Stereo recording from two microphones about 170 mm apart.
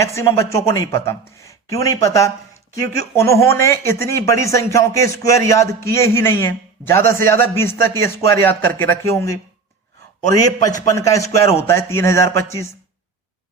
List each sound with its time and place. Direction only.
0.0 s a man's voice: 15° left (ahead or behind)